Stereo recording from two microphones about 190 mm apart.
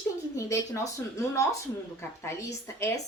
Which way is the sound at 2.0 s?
15° left (ahead or behind).